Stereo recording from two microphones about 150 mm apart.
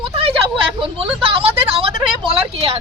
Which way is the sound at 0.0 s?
40° right (ahead or behind).